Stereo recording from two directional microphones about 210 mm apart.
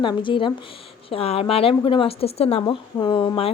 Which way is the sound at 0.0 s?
20° left (ahead or behind).